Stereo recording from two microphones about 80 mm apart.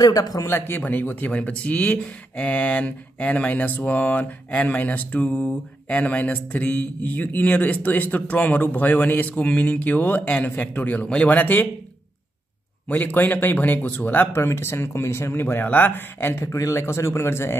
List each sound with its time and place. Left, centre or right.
0.0 s speech: left
0.5 s speech: left
12.8 s speech: left
16.5 s a man's voice: left